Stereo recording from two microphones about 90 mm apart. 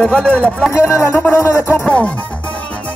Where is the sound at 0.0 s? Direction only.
10° left (ahead or behind).